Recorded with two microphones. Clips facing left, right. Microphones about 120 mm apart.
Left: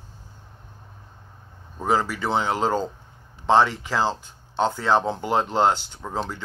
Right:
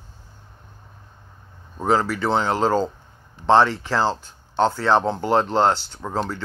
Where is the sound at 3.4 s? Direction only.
10° left (ahead or behind).